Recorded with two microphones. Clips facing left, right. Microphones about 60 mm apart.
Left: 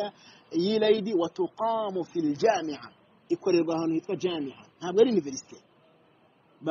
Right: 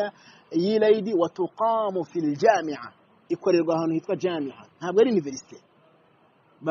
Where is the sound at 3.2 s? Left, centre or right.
Right.